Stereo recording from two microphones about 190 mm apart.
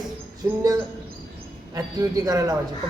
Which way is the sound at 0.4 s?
15° right (ahead or behind).